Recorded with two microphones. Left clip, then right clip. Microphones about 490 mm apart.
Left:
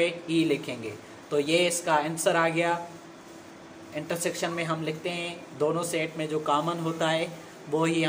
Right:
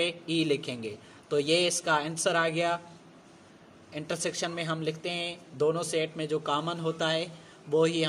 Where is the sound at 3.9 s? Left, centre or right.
Right.